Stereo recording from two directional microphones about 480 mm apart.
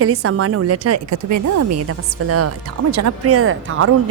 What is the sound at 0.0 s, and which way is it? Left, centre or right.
A woman's voice, right.